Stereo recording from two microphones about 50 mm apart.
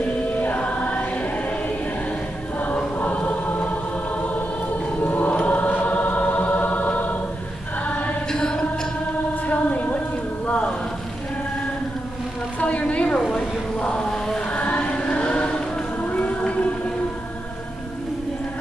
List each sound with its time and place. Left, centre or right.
0.4 s music: left
2.6 s choir: left
5.0 s choir: left
8.3 s chant: centre
9.5 s a sound: left
12.5 s a sound: left
14.5 s choir: left
16.0 s music: left